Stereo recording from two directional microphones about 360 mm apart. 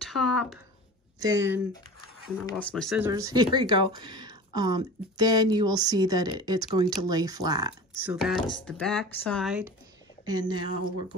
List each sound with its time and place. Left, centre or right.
0.0 s a sound: centre
1.2 s speech: centre
2.4 s speech: centre
10.6 s speech: left